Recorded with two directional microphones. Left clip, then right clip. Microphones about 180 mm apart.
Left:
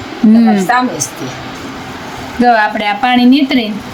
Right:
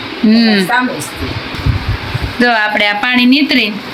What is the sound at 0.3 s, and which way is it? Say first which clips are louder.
Speech: right 1 dB; 15° left (ahead or behind).